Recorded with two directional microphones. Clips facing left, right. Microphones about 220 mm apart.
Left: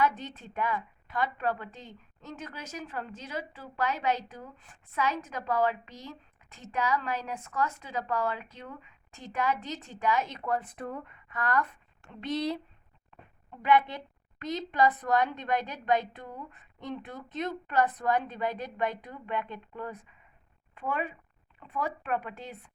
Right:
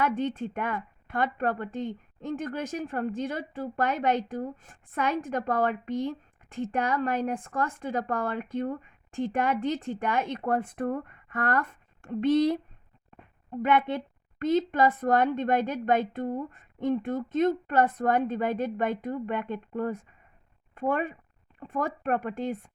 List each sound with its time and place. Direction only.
0.0 s speech: 55° right (ahead or behind)
13.6 s speech: 50° right (ahead or behind)